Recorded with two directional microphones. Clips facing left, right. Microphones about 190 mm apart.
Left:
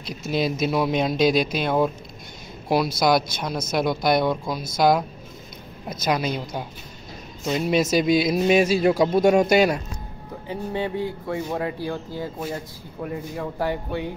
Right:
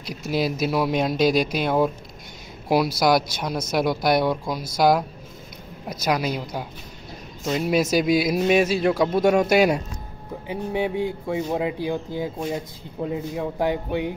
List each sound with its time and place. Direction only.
0.3 s speech: 5° right (ahead or behind)
3.0 s speech: 10° right (ahead or behind)
6.0 s speech: 10° right (ahead or behind)
7.4 s speech: 5° right (ahead or behind)
10.5 s speech: 10° right (ahead or behind)